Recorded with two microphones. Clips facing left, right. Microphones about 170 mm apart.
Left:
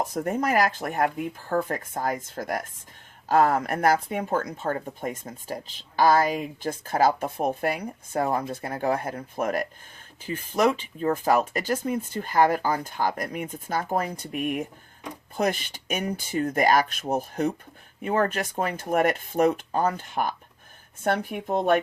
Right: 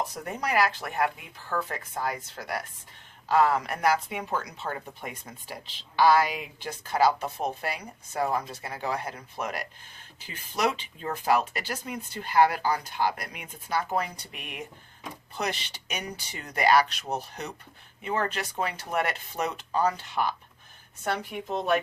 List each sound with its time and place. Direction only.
0.0 s speech: 45° left (ahead or behind)